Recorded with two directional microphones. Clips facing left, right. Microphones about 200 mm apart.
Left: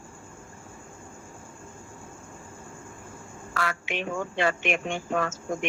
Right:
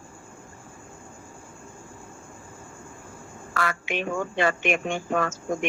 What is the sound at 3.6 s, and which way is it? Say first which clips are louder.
A woman's voice: right 2 dB; 50° right (ahead or behind).